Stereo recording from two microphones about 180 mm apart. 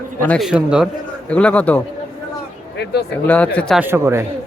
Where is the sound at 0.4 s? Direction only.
5° right (ahead or behind).